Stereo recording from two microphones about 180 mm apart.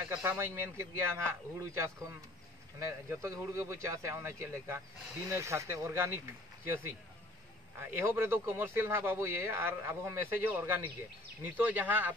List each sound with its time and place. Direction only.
0.1 s speech: 10° right (ahead or behind)